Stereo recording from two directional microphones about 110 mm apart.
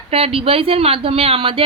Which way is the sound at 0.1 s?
60° right (ahead or behind).